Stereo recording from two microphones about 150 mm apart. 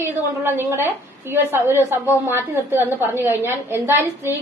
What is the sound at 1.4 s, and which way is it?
Speech, 20° left (ahead or behind).